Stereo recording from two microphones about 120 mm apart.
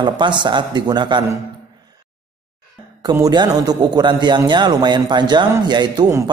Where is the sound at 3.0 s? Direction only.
35° right (ahead or behind).